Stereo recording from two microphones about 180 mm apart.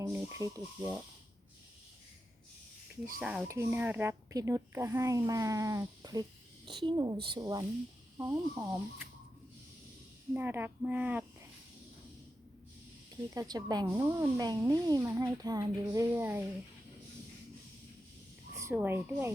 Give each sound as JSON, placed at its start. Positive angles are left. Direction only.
{"t": 0.0, "sound": "speech", "side_deg": -15}
{"t": 3.2, "sound": "speech", "side_deg": -5}
{"t": 3.5, "sound": "speech", "side_deg": -15}
{"t": 10.3, "sound": "speech", "side_deg": -10}
{"t": 13.3, "sound": "speech", "side_deg": -20}
{"t": 18.5, "sound": "speech", "side_deg": -15}